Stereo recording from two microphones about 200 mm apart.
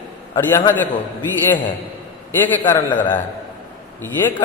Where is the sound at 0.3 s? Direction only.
15° left (ahead or behind).